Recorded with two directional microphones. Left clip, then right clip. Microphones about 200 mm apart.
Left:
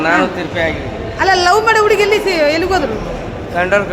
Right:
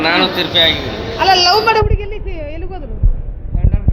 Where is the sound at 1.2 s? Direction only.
25° left (ahead or behind).